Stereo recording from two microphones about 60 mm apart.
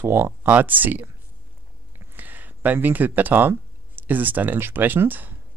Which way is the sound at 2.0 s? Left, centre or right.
Right.